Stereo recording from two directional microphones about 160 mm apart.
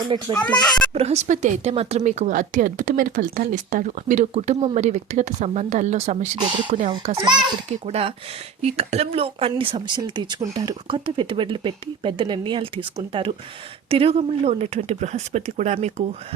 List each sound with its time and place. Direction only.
0.1 s speech: 35° right (ahead or behind)
0.5 s speech: 25° left (ahead or behind)
0.9 s speech: 40° right (ahead or behind)
6.4 s a child's voice: 30° right (ahead or behind)
7.9 s speech: 40° right (ahead or behind)